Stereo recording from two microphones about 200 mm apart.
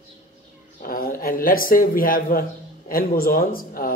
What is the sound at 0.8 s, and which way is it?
Speech, 45° left (ahead or behind).